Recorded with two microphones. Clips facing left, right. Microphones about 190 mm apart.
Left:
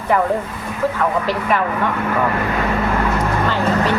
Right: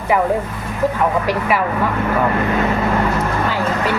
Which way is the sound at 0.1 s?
10° right (ahead or behind).